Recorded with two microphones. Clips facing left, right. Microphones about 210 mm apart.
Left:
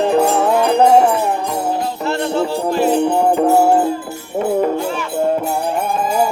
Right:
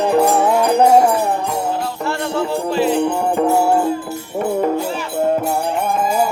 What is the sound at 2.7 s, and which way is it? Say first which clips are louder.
Music: left 1 dB; 45° left (ahead or behind).